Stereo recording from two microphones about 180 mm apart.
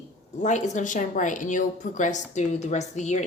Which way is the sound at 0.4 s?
40° left (ahead or behind).